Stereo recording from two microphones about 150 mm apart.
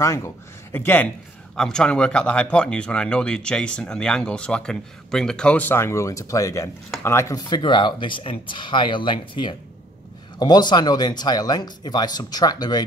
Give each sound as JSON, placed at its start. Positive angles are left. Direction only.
{"t": 0.0, "sound": "speech", "side_deg": 20}